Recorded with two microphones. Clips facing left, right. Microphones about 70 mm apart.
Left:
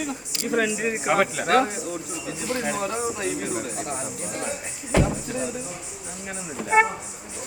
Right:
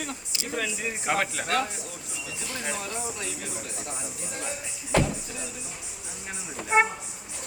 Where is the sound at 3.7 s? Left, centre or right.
Left.